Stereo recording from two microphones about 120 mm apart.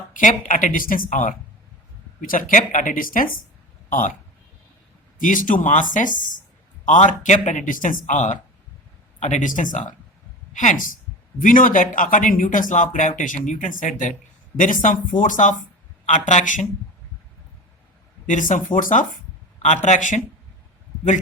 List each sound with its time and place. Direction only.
0.1 s speech: 90° left
2.5 s speech: 90° left
5.3 s speech: 90° left
18.3 s speech: 90° left